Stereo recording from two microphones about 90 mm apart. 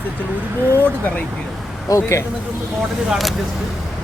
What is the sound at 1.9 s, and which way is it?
Speech, 30° left (ahead or behind).